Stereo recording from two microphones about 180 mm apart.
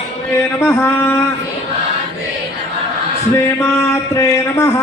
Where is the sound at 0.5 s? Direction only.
15° left (ahead or behind).